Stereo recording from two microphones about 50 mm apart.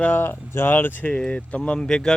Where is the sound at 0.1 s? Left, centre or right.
Left.